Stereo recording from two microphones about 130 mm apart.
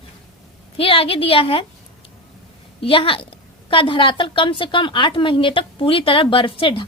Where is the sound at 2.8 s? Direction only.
45° left (ahead or behind).